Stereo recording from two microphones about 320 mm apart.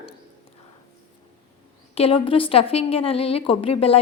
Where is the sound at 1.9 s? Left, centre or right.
Centre.